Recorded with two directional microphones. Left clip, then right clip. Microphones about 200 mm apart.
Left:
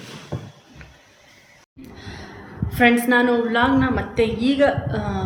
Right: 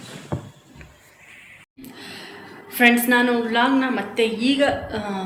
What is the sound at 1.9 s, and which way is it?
Gasp, centre (ahead or behind).